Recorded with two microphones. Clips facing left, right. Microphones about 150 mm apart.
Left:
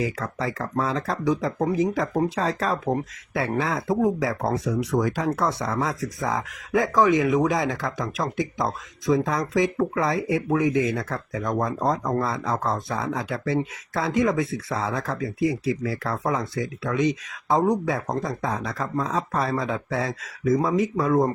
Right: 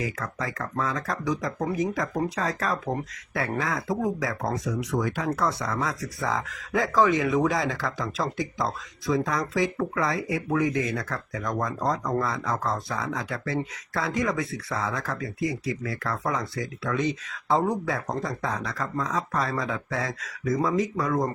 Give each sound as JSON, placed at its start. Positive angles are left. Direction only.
{"t": 0.0, "sound": "speech", "side_deg": 30}
{"t": 5.4, "sound": "speech", "side_deg": 25}
{"t": 17.5, "sound": "speech", "side_deg": 20}